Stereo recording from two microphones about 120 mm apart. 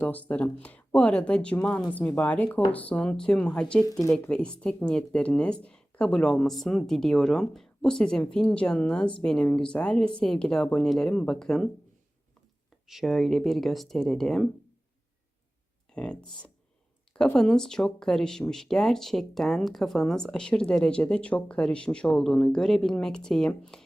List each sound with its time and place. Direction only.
0.0 s speech: 15° left (ahead or behind)
3.8 s speech: 30° left (ahead or behind)
4.2 s speech: 10° left (ahead or behind)
12.9 s speech: centre (ahead or behind)
16.0 s speech: 10° left (ahead or behind)